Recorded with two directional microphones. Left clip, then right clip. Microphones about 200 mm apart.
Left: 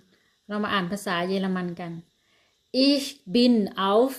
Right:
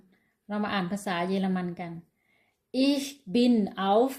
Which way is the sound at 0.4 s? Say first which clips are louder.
Left 4 dB; 15° left (ahead or behind).